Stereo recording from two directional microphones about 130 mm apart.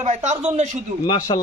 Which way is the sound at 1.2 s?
30° left (ahead or behind).